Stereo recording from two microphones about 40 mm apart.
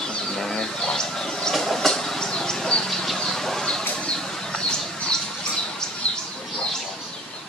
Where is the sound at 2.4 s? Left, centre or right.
Centre.